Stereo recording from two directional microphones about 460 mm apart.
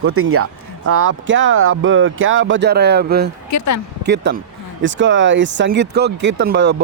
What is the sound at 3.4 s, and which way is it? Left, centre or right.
Speech, left.